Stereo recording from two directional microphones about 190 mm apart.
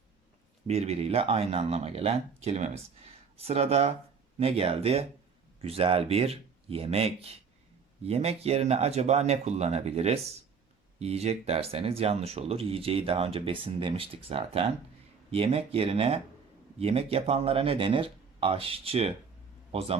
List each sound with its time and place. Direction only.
0.7 s speech: 35° right (ahead or behind)